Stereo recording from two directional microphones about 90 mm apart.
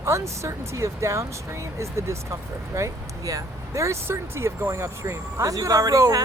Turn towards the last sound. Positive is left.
turn(degrees=-40)  # may be behind; listen again after turning